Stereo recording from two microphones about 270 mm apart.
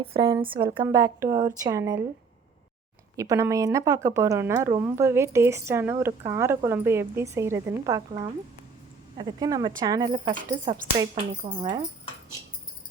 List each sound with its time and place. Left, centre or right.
0.0 s a woman's voice: centre
3.2 s speech: centre